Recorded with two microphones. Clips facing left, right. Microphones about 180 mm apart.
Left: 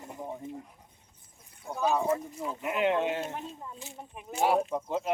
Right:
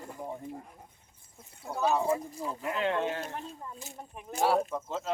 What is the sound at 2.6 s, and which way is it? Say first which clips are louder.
Speech: left 3 dB; 20° left (ahead or behind).